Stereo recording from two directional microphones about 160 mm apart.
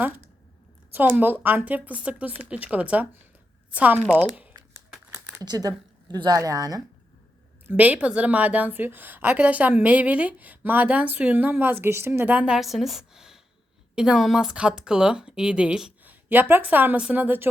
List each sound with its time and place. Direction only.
0.9 s a woman's voice: 10° right (ahead or behind)
5.1 s speech: 25° right (ahead or behind)
7.7 s a woman's voice: 10° right (ahead or behind)